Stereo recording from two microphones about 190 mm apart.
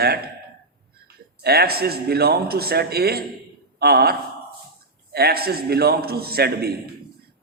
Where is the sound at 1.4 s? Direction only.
55° right (ahead or behind).